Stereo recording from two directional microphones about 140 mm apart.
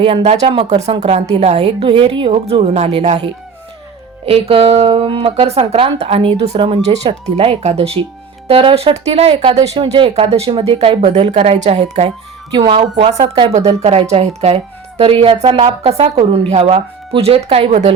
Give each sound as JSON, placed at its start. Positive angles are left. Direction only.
{"t": 0.0, "sound": "a woman's voice", "side_deg": -45}
{"t": 4.3, "sound": "a woman's voice", "side_deg": -45}
{"t": 12.5, "sound": "a woman's voice", "side_deg": -35}
{"t": 13.5, "sound": "a woman's voice", "side_deg": -50}